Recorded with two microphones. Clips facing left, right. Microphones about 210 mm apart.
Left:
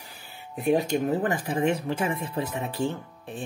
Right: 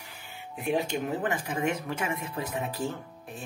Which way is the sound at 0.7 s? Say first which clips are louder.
Left 5 dB; 40° left (ahead or behind).